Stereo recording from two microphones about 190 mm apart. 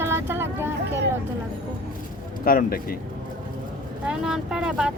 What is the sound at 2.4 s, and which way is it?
Speech, 50° left (ahead or behind).